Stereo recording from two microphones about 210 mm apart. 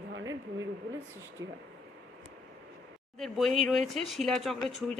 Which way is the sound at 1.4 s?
65° right (ahead or behind).